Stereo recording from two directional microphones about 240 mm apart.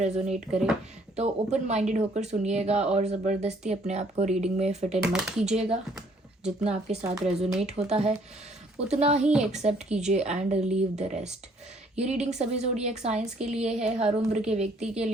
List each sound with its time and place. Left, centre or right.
0.0 s speech: right
0.5 s speech: centre
1.1 s speech: right
5.0 s speech: centre
5.5 s speech: right
7.0 s speech: centre
7.6 s speech: right